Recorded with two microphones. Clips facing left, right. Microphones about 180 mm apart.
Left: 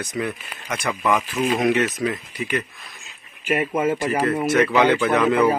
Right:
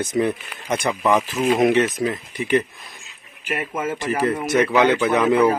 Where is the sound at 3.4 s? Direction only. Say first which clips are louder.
Left 5 dB; 15° left (ahead or behind).